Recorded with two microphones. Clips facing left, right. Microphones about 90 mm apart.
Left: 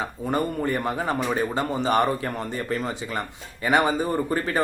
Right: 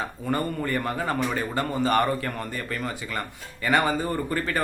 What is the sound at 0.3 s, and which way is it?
A man's voice, 20° left (ahead or behind).